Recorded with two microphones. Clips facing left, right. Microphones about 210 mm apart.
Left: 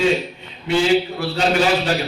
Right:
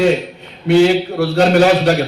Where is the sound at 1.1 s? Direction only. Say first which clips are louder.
Right 7 dB; 65° right (ahead or behind).